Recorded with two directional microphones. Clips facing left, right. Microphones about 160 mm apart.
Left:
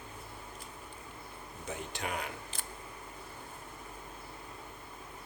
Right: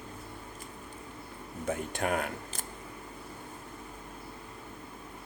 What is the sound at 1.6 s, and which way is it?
Speech, 50° right (ahead or behind).